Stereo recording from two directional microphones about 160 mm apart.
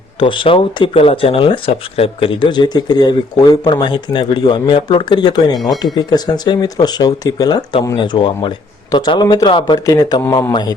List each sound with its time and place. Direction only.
0.2 s a man's voice: 30° left (ahead or behind)
5.5 s speech: centre (ahead or behind)
5.8 s a man's voice: 25° left (ahead or behind)